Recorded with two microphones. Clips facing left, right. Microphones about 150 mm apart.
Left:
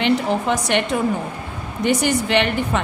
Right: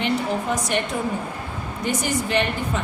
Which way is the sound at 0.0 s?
80° left.